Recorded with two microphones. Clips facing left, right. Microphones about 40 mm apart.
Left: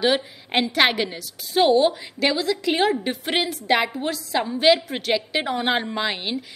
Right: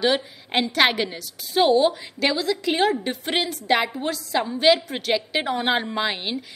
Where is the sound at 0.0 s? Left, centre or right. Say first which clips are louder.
Left 1 dB; centre.